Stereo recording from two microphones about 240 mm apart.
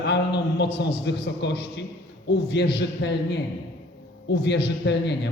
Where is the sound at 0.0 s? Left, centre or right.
Left.